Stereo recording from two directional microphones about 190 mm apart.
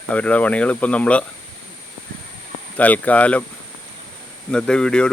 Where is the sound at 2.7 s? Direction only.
10° left (ahead or behind).